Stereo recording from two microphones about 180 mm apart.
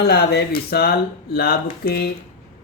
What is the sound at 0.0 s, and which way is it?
Speech, 65° left (ahead or behind).